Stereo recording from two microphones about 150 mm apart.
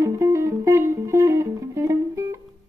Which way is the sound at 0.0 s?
20° right (ahead or behind).